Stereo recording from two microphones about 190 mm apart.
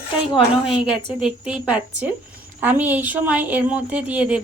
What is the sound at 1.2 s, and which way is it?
A woman's voice, 5° right (ahead or behind).